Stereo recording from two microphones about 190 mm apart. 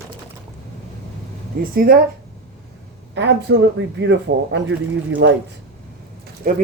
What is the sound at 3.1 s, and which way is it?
A man's voice, 65° right (ahead or behind).